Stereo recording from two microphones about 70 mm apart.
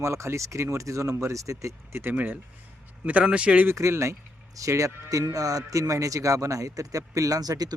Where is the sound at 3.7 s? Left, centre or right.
Right.